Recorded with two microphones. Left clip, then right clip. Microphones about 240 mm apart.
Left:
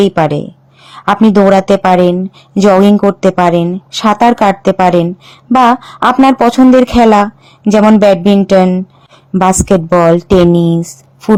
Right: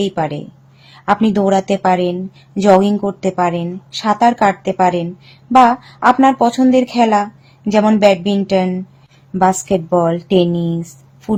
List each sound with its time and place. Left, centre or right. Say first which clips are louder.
0.0 s a woman's voice: left 9 dB; left